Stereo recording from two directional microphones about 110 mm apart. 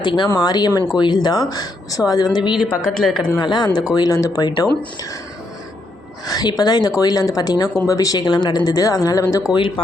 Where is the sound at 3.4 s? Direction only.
40° left (ahead or behind).